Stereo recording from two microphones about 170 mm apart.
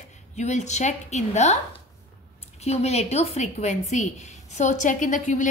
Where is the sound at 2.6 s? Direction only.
40° left (ahead or behind).